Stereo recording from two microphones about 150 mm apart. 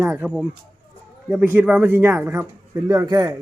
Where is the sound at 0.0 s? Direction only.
10° right (ahead or behind).